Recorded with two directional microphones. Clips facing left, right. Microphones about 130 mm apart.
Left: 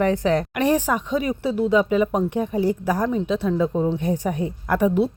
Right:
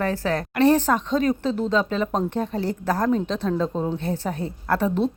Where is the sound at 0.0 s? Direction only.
20° left (ahead or behind).